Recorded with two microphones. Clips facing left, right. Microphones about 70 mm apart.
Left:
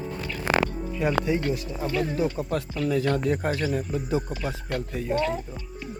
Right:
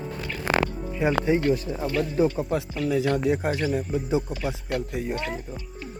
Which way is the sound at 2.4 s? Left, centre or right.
Centre.